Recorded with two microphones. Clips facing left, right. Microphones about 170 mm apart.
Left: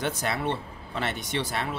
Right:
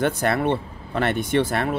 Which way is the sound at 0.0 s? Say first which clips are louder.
Right 7 dB; 55° right (ahead or behind).